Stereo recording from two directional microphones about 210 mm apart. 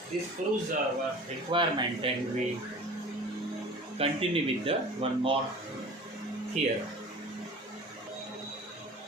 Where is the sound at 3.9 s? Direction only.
30° right (ahead or behind).